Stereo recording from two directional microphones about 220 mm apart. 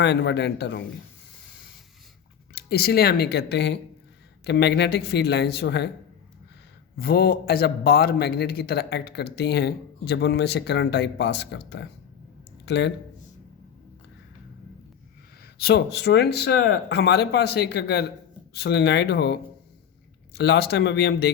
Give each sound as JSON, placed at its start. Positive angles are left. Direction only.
{"t": 0.0, "sound": "a man's voice", "side_deg": 50}
{"t": 2.6, "sound": "a man's voice", "side_deg": 45}
{"t": 6.9, "sound": "a man's voice", "side_deg": 45}
{"t": 15.5, "sound": "a man's voice", "side_deg": 45}